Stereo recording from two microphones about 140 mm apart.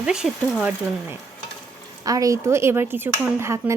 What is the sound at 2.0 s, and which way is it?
Speech, 25° right (ahead or behind).